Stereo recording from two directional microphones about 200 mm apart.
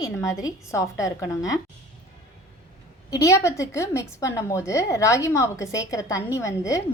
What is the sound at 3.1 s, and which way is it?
A woman's voice, 15° left (ahead or behind).